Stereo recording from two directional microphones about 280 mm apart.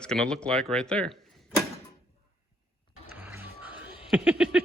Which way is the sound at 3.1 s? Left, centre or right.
Centre.